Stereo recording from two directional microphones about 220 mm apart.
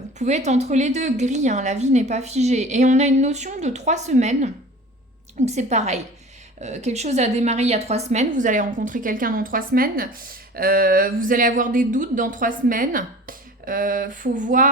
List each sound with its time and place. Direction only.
0.2 s a woman's voice: 30° right (ahead or behind)